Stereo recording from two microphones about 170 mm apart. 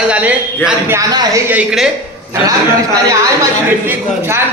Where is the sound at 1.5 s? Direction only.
5° right (ahead or behind).